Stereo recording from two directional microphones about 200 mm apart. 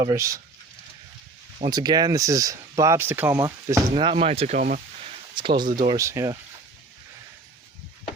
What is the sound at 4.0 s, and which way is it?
Speech, 25° right (ahead or behind).